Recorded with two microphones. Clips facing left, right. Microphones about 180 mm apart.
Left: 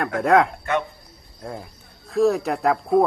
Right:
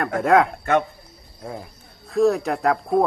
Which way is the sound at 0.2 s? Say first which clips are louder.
Even; centre (ahead or behind).